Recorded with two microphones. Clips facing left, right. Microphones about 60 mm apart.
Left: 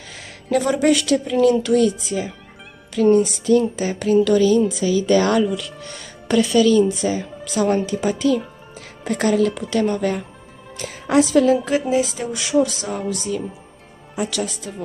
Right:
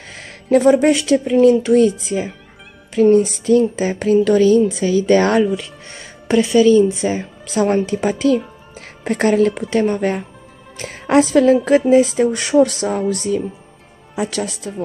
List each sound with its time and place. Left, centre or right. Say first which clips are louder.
0.1 s a sound: right 6 dB; right
0.7 s speech: right 4 dB; right
5.6 s a woman's voice: even; right